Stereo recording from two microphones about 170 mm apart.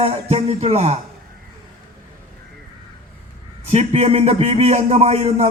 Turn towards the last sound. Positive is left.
turn(degrees=-40)  # may be behind; listen again after turning